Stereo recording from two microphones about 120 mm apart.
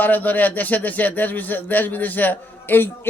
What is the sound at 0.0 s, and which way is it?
A man's voice, 15° left (ahead or behind).